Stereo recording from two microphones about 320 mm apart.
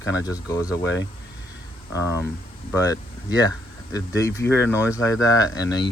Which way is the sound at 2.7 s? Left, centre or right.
Centre.